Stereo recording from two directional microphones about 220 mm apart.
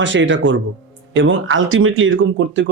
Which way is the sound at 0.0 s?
60° right (ahead or behind).